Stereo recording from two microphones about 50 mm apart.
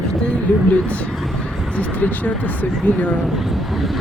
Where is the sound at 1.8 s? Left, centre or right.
Left.